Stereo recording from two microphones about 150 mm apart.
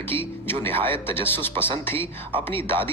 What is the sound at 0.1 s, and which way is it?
Music, 15° left (ahead or behind).